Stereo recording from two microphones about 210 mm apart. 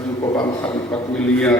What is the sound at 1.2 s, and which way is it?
Speech, 5° left (ahead or behind).